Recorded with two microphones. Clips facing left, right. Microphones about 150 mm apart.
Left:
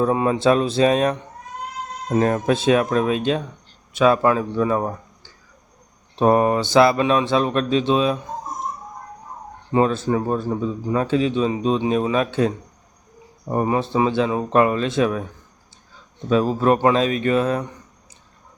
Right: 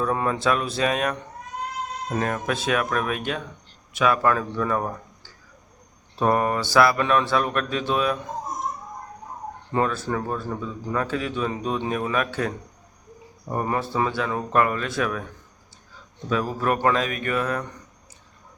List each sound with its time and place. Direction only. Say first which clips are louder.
0.0 s a man's voice: left 6 dB; 20° left (ahead or behind)
9.7 s a man's voice: left 6 dB; 25° left (ahead or behind)
16.3 s a man's voice: left 7 dB; 25° left (ahead or behind)